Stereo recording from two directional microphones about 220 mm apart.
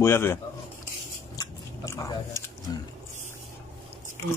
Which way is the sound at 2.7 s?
20° left (ahead or behind).